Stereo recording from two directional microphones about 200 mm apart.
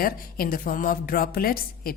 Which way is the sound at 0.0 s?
45° left (ahead or behind).